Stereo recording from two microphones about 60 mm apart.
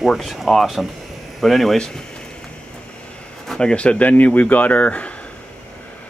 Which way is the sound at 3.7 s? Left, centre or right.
Centre.